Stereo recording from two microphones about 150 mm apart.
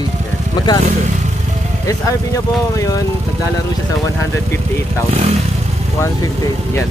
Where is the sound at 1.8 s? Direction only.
20° left (ahead or behind).